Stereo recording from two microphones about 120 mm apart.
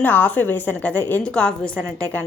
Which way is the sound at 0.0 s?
15° left (ahead or behind).